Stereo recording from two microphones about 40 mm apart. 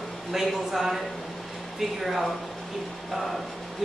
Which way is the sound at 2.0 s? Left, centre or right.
Centre.